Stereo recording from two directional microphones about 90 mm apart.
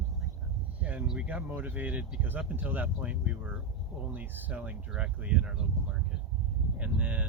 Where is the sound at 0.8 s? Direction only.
15° right (ahead or behind).